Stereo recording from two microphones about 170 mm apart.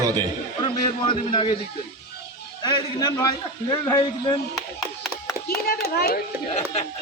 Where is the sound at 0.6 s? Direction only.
30° left (ahead or behind).